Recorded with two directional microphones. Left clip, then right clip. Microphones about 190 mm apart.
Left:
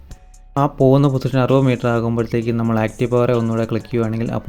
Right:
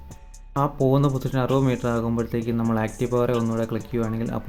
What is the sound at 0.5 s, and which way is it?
Speech, 30° left (ahead or behind).